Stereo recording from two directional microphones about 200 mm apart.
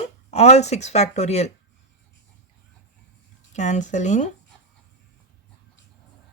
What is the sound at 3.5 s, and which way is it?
Speech, 35° left (ahead or behind).